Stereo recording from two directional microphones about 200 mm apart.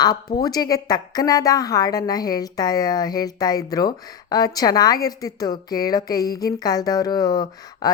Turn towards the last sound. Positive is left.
turn(degrees=20)  # may be behind; listen again after turning